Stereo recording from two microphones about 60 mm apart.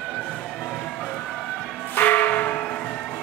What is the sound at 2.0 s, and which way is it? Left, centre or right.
Church bell, left.